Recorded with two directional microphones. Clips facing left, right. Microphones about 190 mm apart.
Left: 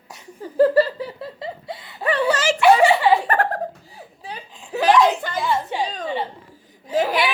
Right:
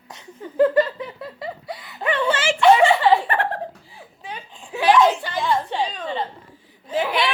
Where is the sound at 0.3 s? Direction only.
35° left (ahead or behind).